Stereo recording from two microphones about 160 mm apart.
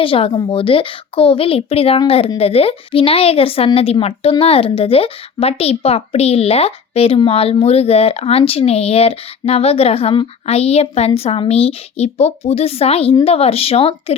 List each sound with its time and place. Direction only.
0.0 s speech: 35° left (ahead or behind)